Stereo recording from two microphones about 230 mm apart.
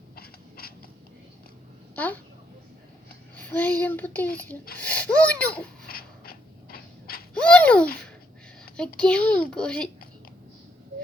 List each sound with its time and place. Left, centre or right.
0.2 s a sound: left
2.0 s child singing: centre
3.5 s child singing: centre
4.8 s a child's voice: centre
5.9 s dog: left
7.3 s a sound: centre
9.0 s a child's voice: centre